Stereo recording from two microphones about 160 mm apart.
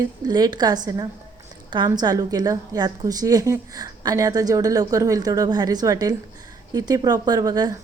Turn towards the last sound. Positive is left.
turn(degrees=-25)  # may be behind; listen again after turning